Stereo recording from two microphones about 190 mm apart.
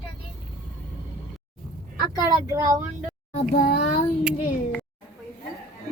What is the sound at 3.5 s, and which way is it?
Speech, 50° left (ahead or behind).